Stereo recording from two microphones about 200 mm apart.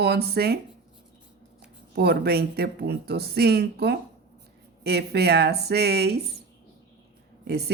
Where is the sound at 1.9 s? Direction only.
55° right (ahead or behind).